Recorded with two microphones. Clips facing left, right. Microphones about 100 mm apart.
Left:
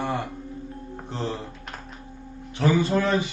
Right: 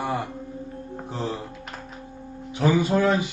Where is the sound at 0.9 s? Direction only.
5° right (ahead or behind).